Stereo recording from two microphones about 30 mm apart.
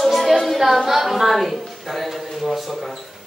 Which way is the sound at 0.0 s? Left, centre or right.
Centre.